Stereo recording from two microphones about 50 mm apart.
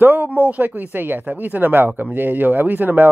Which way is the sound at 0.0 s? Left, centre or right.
Right.